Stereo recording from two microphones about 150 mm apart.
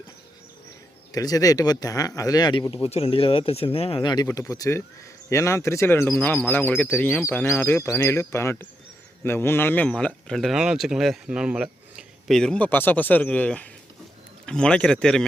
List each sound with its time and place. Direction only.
1.1 s speech: 25° left (ahead or behind); by 15.3 s 5° left (ahead or behind)